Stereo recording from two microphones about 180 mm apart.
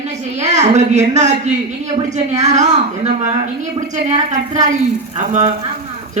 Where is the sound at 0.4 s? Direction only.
40° right (ahead or behind).